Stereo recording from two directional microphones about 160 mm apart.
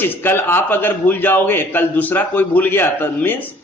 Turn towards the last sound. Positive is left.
turn(degrees=10)  # may be behind; listen again after turning